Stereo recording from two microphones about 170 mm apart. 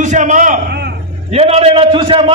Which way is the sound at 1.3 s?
35° right (ahead or behind).